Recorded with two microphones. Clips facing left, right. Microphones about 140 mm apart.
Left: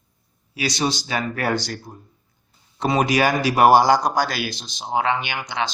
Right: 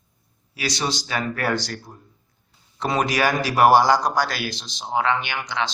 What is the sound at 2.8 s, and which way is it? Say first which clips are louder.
Speech: left 3 dB; 15° left (ahead or behind).